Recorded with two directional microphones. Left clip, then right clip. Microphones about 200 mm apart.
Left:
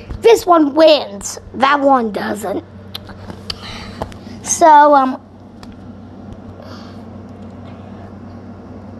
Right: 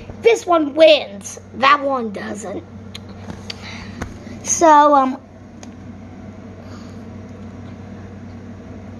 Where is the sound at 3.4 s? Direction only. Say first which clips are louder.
Left 5 dB; 25° left (ahead or behind).